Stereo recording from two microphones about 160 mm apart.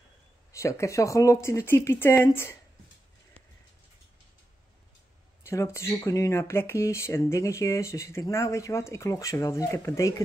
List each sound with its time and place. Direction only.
0.5 s speech: 20° left (ahead or behind)
5.4 s speech: 15° left (ahead or behind)